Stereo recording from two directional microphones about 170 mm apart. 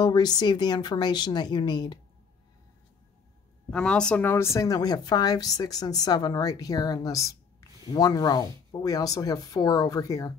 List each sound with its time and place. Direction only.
0.0 s speech: 25° left (ahead or behind)
3.7 s speech: 5° left (ahead or behind)